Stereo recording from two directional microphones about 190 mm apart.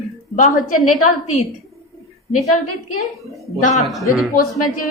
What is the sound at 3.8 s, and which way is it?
Speech, centre (ahead or behind).